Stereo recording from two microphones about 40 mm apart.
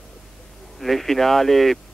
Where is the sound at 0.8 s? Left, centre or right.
Centre.